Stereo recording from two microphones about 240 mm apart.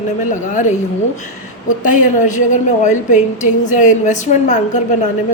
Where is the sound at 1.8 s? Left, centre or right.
Left.